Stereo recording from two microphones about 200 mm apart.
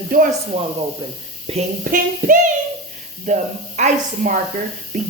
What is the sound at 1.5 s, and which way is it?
Speech, 30° right (ahead or behind).